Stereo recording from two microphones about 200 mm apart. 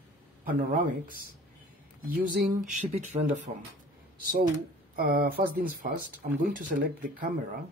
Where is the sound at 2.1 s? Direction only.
40° right (ahead or behind).